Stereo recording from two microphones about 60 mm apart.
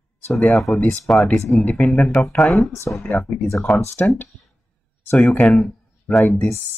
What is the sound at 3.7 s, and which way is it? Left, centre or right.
Speech, centre.